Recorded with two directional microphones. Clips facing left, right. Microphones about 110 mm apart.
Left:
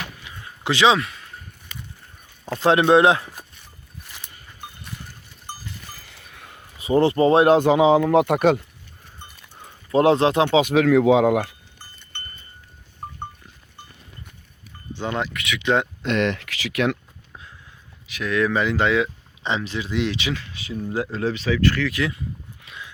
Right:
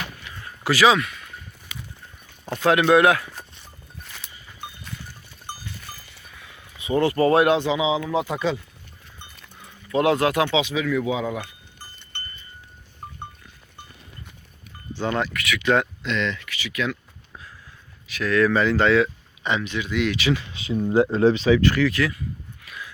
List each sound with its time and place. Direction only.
0.3 s a sound: 20° left (ahead or behind)
2.6 s speech: 25° left (ahead or behind)
6.4 s a sound: 45° left (ahead or behind); by 7.4 s 25° left (ahead or behind)
7.4 s speech: 45° left (ahead or behind); by 8.6 s 65° left (ahead or behind)
9.6 s speech: 35° left (ahead or behind)
10.5 s speech: 50° left (ahead or behind)
10.8 s speech: 80° left
14.9 s speech: 20° left (ahead or behind)
16.0 s speech: 60° left (ahead or behind)
18.1 s speech: 15° left (ahead or behind)
19.5 s speech: 30° left (ahead or behind)
20.3 s speech: 20° right (ahead or behind)
21.9 s speech: 20° left (ahead or behind)
22.6 s horse: 25° left (ahead or behind)